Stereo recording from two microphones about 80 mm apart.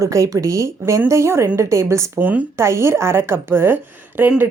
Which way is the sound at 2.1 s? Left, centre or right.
Right.